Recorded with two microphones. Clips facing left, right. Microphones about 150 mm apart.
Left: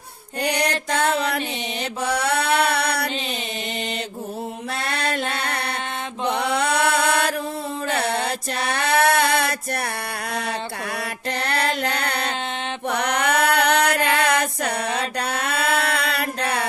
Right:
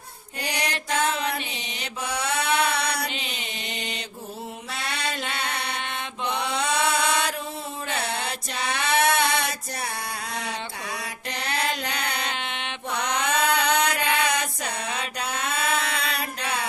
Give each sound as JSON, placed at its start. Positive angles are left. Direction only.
{"t": 0.4, "sound": "music", "side_deg": 65}
{"t": 2.0, "sound": "mantra", "side_deg": 60}
{"t": 2.6, "sound": "music", "side_deg": 60}
{"t": 4.7, "sound": "music", "side_deg": 55}
{"t": 6.3, "sound": "chant", "side_deg": 60}
{"t": 7.9, "sound": "mantra", "side_deg": 60}
{"t": 8.3, "sound": "a sound", "side_deg": 60}
{"t": 10.9, "sound": "mantra", "side_deg": 60}
{"t": 12.9, "sound": "a sound", "side_deg": 60}